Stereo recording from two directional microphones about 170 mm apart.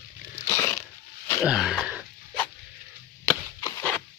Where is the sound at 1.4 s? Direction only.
5° right (ahead or behind).